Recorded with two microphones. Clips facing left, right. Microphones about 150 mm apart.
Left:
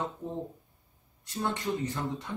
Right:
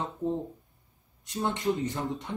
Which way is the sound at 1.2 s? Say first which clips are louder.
Right 2 dB; 20° right (ahead or behind).